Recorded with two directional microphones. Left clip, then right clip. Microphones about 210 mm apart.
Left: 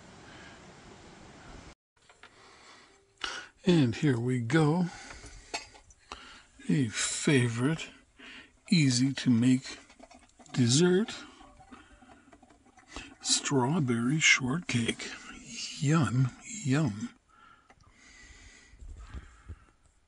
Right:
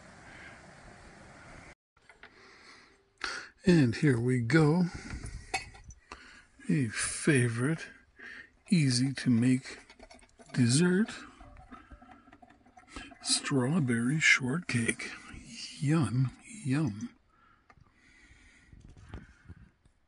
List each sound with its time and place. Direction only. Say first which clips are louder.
2.3 s a sound: even; centre (ahead or behind)
10.5 s speech: left 3 dB; 10° right (ahead or behind)
12.9 s speech: left 2 dB; 10° right (ahead or behind); by 17.1 s 20° left (ahead or behind)
18.1 s snort: left 5 dB; 15° left (ahead or behind)